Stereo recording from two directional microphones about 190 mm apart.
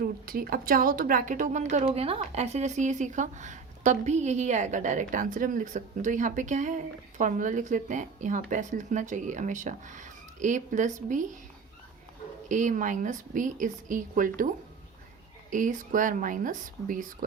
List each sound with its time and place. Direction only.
0.0 s a woman's voice: 50° right (ahead or behind)
12.5 s a woman's voice: 40° right (ahead or behind)